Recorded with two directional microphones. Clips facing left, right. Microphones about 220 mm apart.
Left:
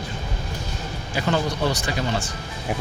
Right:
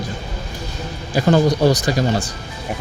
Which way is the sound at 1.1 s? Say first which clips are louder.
Right 9 dB; 40° right (ahead or behind).